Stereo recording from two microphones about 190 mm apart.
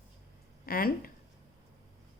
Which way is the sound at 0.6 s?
50° left (ahead or behind).